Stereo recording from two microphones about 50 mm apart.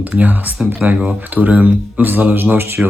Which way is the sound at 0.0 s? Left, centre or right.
Right.